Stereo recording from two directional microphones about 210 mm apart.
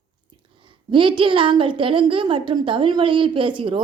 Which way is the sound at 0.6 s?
25° right (ahead or behind).